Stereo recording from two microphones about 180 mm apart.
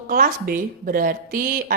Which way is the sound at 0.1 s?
50° right (ahead or behind).